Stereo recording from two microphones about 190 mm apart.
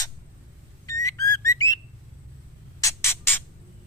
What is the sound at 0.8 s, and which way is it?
Whistle, 15° left (ahead or behind).